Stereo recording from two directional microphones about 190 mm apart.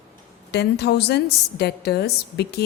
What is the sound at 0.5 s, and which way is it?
A woman's voice, 60° left (ahead or behind).